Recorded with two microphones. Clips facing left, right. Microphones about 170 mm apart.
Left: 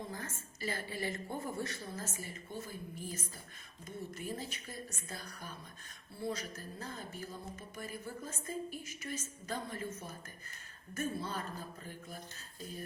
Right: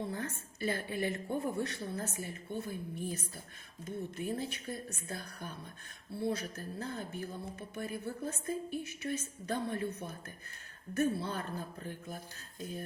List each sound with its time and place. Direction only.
0.1 s a woman's voice: 65° right (ahead or behind)